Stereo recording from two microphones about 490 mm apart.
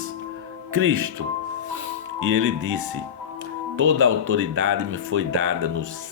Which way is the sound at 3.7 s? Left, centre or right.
Right.